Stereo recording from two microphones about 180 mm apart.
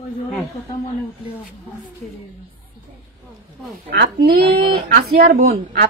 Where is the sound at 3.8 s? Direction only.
65° right (ahead or behind).